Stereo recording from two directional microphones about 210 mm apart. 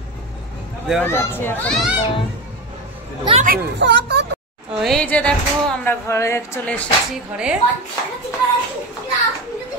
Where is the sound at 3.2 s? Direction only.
25° right (ahead or behind).